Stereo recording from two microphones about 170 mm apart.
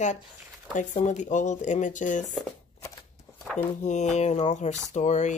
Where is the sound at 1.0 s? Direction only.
45° left (ahead or behind).